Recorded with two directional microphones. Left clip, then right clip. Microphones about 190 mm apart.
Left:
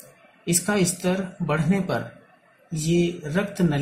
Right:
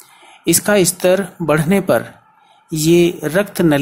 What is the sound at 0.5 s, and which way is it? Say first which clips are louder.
Speech: right 10 dB; 35° right (ahead or behind).